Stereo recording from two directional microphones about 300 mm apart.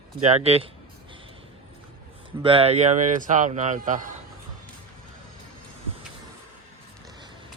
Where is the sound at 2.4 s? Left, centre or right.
Centre.